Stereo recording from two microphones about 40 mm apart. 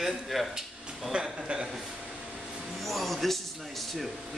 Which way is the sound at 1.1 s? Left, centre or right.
Right.